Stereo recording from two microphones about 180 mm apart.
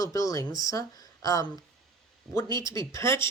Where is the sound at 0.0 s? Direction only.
20° left (ahead or behind).